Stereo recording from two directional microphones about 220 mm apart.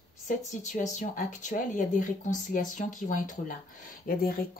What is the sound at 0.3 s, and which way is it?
Speech, 35° left (ahead or behind).